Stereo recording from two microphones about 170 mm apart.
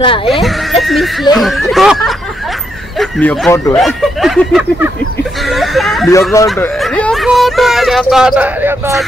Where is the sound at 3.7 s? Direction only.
Centre (ahead or behind).